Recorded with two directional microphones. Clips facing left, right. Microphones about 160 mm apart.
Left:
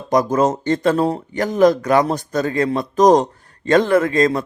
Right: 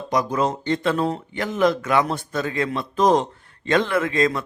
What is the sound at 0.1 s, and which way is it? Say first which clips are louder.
Speech: left 6 dB; 45° left (ahead or behind).